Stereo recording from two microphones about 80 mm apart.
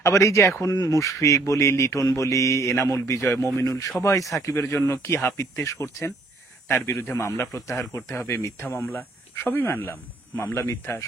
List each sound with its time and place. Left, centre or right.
0.0 s a man's voice: left
8.6 s speech: left